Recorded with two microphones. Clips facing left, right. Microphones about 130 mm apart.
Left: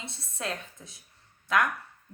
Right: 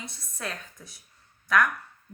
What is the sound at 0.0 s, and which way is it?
A woman's voice, 25° left (ahead or behind).